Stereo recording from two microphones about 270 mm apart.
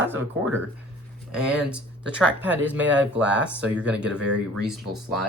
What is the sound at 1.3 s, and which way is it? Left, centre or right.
Speech, centre.